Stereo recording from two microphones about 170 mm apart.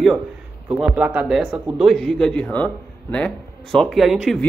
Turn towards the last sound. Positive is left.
turn(degrees=0)  # may be behind; listen again after turning